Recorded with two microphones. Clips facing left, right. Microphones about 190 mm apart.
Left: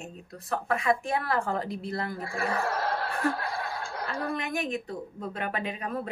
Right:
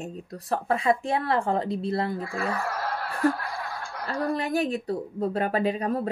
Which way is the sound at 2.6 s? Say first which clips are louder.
Left 1 dB; 25° left (ahead or behind).